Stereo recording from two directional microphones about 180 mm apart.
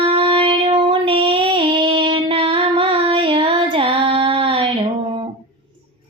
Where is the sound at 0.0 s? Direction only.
30° right (ahead or behind).